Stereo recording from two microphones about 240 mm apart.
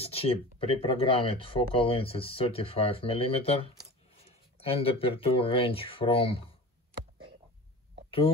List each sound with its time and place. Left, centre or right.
0.0 s speech: left